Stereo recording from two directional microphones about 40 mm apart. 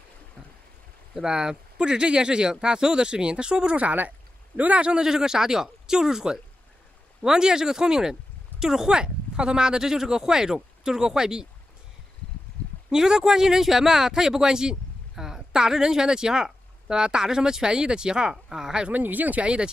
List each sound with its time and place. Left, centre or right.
1.1 s speech: centre
3.7 s speech: right
4.8 s speech: centre
12.9 s speech: centre
18.9 s speech: right
19.4 s speech: right